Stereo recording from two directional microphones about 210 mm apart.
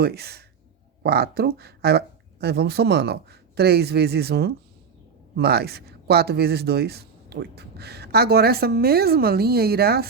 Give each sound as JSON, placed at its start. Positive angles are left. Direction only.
{"t": 0.0, "sound": "speech", "side_deg": -50}